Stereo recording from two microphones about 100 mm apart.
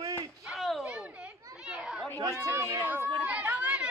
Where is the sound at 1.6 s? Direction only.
10° right (ahead or behind).